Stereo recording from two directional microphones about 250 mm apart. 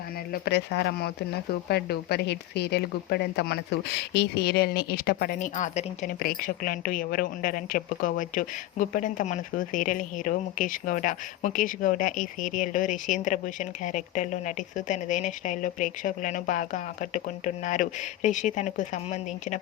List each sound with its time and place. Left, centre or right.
0.4 s a woman's voice: left